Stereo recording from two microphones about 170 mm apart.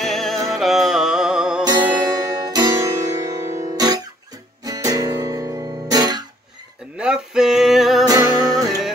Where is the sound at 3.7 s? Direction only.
20° right (ahead or behind).